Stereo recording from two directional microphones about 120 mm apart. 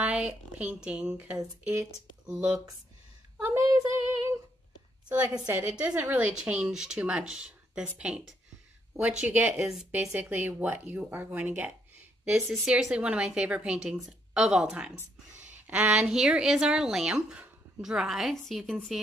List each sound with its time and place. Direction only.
0.0 s a woman's voice: 10° right (ahead or behind)
3.3 s child singing: 20° right (ahead or behind)
5.5 s a woman's voice: 15° right (ahead or behind)
9.7 s a woman's voice: 5° right (ahead or behind)
10.1 s a woman's voice: 15° right (ahead or behind)